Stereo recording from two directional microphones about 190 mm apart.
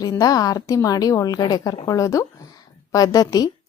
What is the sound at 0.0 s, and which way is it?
A woman's voice, 20° left (ahead or behind).